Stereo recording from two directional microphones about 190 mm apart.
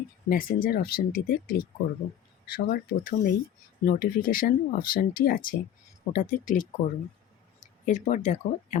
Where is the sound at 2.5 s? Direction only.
50° left (ahead or behind).